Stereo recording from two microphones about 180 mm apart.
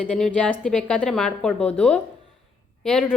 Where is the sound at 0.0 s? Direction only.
5° left (ahead or behind).